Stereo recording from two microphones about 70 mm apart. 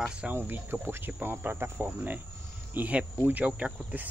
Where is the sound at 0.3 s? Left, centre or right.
Right.